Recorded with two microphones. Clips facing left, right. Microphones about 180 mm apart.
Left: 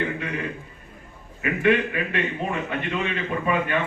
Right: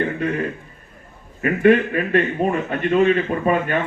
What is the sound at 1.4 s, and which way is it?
A man's voice, 45° right (ahead or behind).